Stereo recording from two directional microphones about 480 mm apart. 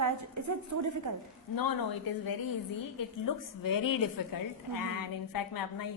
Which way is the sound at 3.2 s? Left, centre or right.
Left.